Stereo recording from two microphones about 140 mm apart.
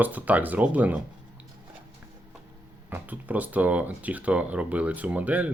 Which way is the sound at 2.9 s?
10° right (ahead or behind).